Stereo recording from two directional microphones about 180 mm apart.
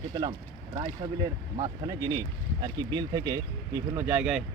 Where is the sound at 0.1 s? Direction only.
25° right (ahead or behind).